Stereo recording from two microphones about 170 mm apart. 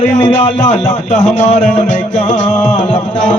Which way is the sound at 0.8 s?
45° left (ahead or behind).